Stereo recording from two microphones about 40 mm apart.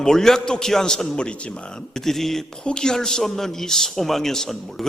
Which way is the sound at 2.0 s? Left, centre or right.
Centre.